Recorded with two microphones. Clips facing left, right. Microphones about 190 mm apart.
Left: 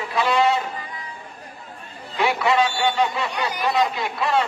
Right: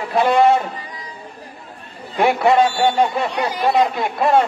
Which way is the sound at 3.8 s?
50° right (ahead or behind).